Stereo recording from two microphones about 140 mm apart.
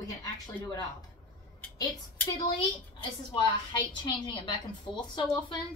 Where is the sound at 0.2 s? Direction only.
25° left (ahead or behind).